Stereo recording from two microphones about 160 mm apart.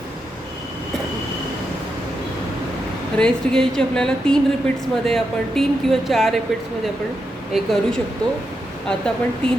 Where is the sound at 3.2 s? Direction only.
5° left (ahead or behind).